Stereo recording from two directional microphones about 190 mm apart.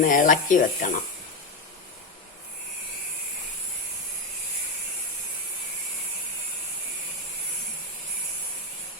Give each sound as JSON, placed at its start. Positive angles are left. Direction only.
{"t": 0.0, "sound": "speech", "side_deg": 45}